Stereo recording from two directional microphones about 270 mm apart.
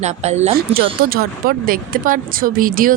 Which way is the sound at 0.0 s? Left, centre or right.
Right.